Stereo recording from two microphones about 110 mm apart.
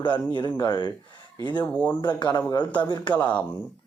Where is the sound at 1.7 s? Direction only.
15° left (ahead or behind).